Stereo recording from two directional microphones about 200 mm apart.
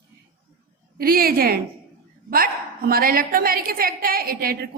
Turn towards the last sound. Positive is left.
turn(degrees=-50)  # may be behind; listen again after turning